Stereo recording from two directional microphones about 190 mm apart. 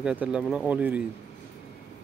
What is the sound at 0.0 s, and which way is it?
Speech, 5° right (ahead or behind).